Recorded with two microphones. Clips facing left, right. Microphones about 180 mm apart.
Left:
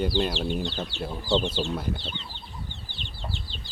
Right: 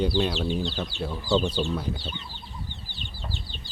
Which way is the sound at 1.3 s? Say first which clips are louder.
Right 1 dB; 25° left (ahead or behind).